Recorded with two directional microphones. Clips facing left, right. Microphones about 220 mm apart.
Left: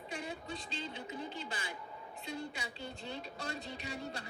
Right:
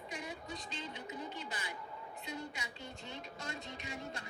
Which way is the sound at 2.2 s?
30° left (ahead or behind).